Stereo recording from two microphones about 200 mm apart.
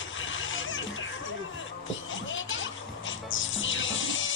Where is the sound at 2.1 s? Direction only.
75° left (ahead or behind).